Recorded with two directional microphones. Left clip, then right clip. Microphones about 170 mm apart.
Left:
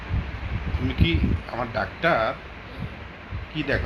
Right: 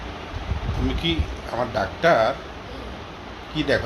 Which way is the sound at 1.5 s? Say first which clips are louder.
Right 5 dB; 10° left (ahead or behind).